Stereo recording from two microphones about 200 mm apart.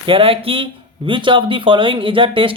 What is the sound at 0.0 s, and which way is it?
Speech, 25° right (ahead or behind).